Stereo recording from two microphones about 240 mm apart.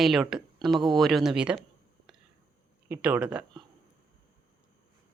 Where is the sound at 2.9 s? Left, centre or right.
Centre.